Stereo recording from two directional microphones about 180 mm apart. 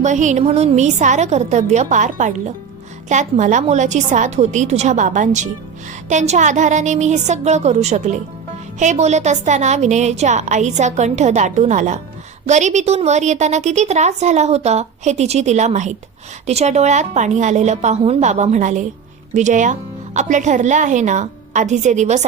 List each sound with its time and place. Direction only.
0.0 s a woman's voice: 40° right (ahead or behind)